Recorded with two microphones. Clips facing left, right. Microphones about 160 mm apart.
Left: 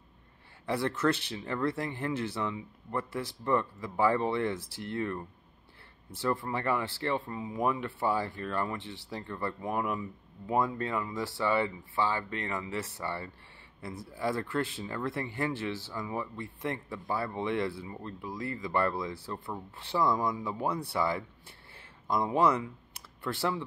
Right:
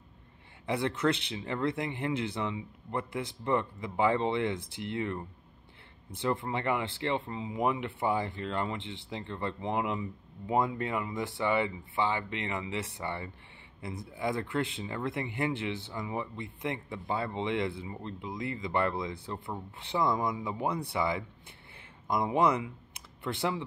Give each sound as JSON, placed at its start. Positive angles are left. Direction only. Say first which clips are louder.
{"t": 0.7, "sound": "speech", "louder": "even", "side_deg": -20}